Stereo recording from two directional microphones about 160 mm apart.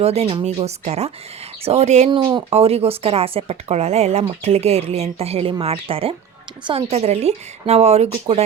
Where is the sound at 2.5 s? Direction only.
40° right (ahead or behind).